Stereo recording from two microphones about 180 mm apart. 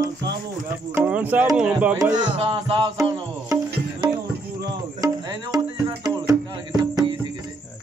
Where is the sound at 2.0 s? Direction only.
25° right (ahead or behind).